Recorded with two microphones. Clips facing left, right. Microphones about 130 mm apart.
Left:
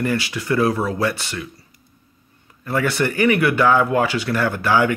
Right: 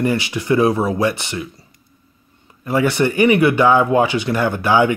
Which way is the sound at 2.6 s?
20° right (ahead or behind).